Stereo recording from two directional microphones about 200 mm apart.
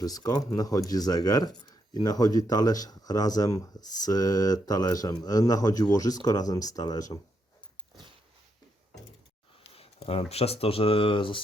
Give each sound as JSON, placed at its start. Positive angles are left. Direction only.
{"t": 0.0, "sound": "speech", "side_deg": 20}
{"t": 9.7, "sound": "speech", "side_deg": 30}